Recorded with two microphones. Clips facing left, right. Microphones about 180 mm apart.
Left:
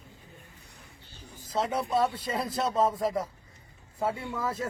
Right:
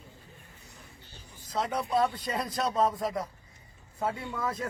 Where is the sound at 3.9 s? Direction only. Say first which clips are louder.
Left 2 dB; 10° left (ahead or behind).